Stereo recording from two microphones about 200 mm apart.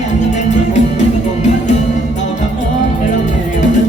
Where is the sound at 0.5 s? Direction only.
35° left (ahead or behind).